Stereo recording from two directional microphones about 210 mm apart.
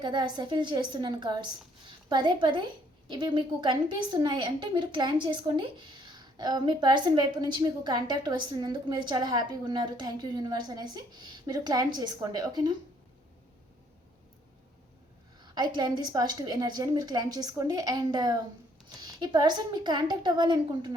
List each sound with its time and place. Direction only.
0.0 s a woman's voice: 20° right (ahead or behind)
15.5 s a woman's voice: 20° right (ahead or behind)